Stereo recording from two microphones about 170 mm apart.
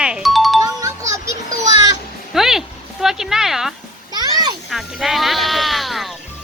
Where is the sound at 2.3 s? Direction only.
Centre (ahead or behind).